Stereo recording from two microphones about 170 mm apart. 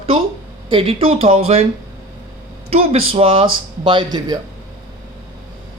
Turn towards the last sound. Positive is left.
turn(degrees=-25)  # may be behind; listen again after turning